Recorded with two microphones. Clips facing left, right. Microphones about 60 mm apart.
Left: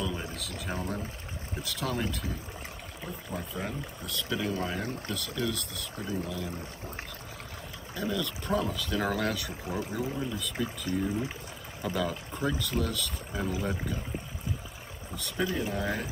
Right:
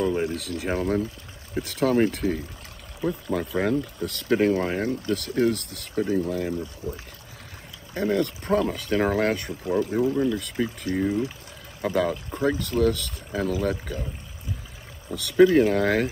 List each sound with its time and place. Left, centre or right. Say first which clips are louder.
0.0 s a sound: right 10 dB; right
0.4 s speech: right 9 dB; right
3.3 s speech: right 11 dB; right
5.6 s speech: right 10 dB; right
7.9 s speech: right 9 dB; right
10.1 s speech: right 9 dB; right
15.1 s speech: right 15 dB; right